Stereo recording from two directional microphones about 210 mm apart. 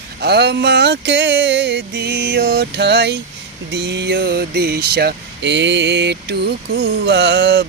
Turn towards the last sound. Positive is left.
turn(degrees=-50)  # may be behind; listen again after turning